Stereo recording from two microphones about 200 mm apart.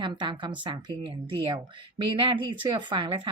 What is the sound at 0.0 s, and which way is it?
Speech, 25° right (ahead or behind).